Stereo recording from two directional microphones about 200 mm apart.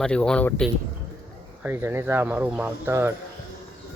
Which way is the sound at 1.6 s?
10° right (ahead or behind).